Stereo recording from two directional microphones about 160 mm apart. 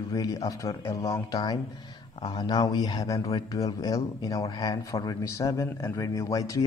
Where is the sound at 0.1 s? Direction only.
20° left (ahead or behind).